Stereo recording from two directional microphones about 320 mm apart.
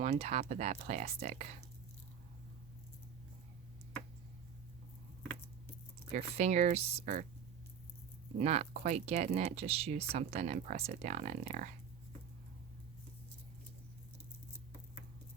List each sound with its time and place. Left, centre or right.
0.0 s speech: centre
6.1 s speech: right
8.4 s speech: centre